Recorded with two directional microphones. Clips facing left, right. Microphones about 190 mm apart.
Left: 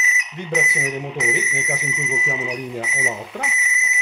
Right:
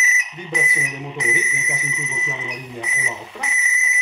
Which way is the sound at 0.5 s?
75° left (ahead or behind).